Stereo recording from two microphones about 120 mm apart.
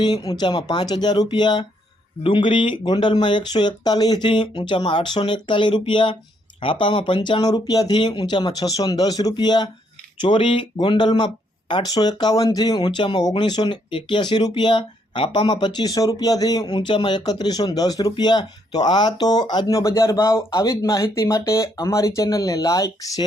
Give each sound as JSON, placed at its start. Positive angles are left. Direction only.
{"t": 0.0, "sound": "speech", "side_deg": 35}